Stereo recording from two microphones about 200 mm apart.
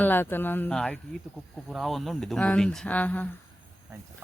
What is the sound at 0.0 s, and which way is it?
Speech, 10° left (ahead or behind).